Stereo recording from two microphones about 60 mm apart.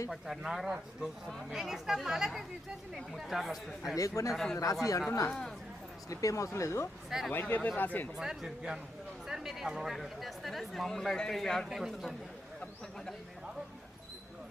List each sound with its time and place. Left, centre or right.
0.1 s speech: centre
3.9 s speech: left
4.3 s speech: centre
4.5 s speech: left
5.3 s speech: centre
6.1 s speech: left
6.6 s speech: left
7.1 s speech: centre
7.4 s speech: left
8.1 s speech: centre